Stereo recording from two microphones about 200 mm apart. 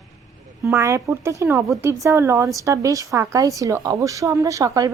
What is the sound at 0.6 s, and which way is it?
A woman's voice, 15° right (ahead or behind).